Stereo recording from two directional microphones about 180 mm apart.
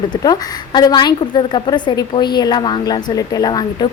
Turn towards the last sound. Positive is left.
turn(degrees=25)  # may be behind; listen again after turning